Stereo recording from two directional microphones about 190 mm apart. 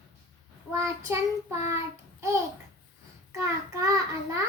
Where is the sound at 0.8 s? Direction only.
15° right (ahead or behind).